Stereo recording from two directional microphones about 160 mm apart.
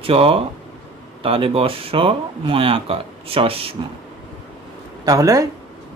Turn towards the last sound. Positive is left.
turn(degrees=-20)  # may be behind; listen again after turning